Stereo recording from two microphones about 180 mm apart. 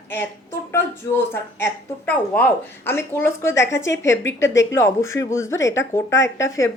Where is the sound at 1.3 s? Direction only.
15° left (ahead or behind).